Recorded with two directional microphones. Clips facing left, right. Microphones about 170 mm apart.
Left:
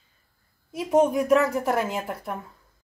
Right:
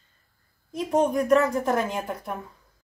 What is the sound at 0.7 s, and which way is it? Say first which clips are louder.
Speech: left 2 dB; 5° left (ahead or behind).